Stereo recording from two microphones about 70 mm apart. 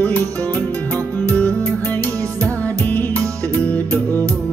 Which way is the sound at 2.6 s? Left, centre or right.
Left.